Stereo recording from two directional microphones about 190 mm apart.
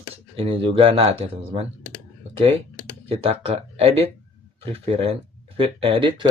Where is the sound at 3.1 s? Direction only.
30° right (ahead or behind).